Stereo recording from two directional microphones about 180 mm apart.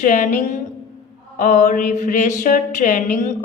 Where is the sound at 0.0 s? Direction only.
45° left (ahead or behind).